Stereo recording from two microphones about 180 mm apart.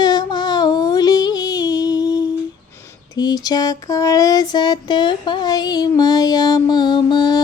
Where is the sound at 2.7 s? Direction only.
20° left (ahead or behind).